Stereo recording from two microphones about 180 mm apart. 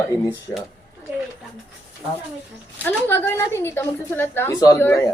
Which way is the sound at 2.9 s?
10° left (ahead or behind).